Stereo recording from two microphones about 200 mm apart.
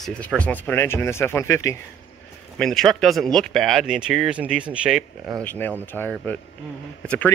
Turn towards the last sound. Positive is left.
turn(degrees=10)  # may be behind; listen again after turning